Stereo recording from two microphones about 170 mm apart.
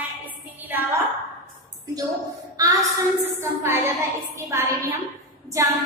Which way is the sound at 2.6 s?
20° right (ahead or behind).